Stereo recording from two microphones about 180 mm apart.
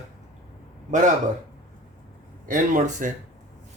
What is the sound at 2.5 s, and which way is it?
Speech, 45° right (ahead or behind).